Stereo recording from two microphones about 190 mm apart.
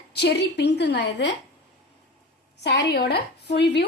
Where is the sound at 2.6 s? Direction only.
65° left (ahead or behind).